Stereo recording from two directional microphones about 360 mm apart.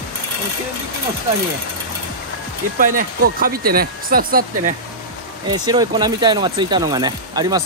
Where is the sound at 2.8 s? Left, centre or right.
Right.